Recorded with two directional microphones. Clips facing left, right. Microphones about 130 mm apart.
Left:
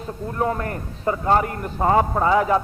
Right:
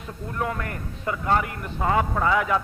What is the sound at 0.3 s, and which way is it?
A man's voice, 30° left (ahead or behind).